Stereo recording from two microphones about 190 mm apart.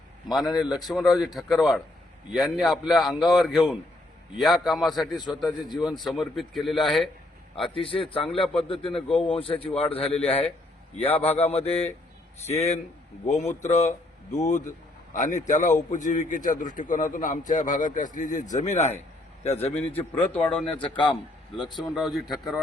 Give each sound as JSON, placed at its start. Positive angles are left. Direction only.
{"t": 0.6, "sound": "a man's voice", "side_deg": 0}
{"t": 5.5, "sound": "a man's voice", "side_deg": 20}
{"t": 5.8, "sound": "a man's voice", "side_deg": 0}
{"t": 7.8, "sound": "a man's voice", "side_deg": 30}
{"t": 19.7, "sound": "a man's voice", "side_deg": 10}
{"t": 20.7, "sound": "a man's voice", "side_deg": 25}
{"t": 21.9, "sound": "a man's voice", "side_deg": 0}